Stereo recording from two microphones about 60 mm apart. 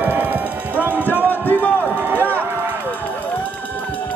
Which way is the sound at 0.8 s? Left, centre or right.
Right.